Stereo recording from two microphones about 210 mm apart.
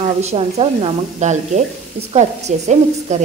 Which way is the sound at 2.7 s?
35° right (ahead or behind).